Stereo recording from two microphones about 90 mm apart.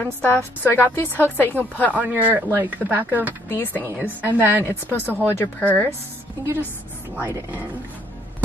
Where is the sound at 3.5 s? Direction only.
25° left (ahead or behind).